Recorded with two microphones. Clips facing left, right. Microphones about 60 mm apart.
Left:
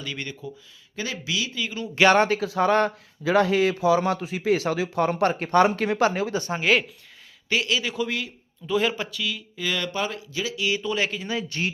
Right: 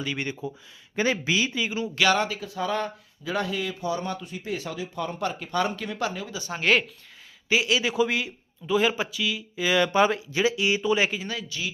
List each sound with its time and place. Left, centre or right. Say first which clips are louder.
0.0 s speech: right 3 dB; centre
0.9 s speech: right 5 dB; right
1.5 s speech: right 2 dB; centre
2.1 s speech: left 7 dB; left
6.6 s speech: even; centre
7.5 s a man's voice: right 2 dB; centre
11.4 s speech: left 5 dB; left